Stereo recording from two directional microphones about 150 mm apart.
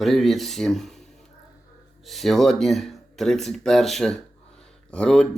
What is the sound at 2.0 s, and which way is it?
Speech, centre (ahead or behind).